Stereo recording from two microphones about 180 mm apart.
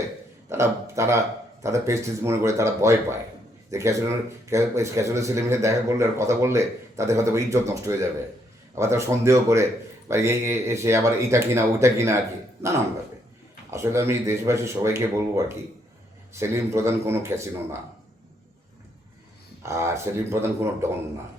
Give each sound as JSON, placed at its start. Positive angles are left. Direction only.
{"t": 0.5, "sound": "speech", "side_deg": -15}
{"t": 13.7, "sound": "speech", "side_deg": -15}
{"t": 19.6, "sound": "speech", "side_deg": -15}